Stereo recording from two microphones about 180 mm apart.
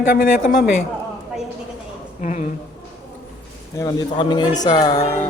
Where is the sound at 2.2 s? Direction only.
45° left (ahead or behind).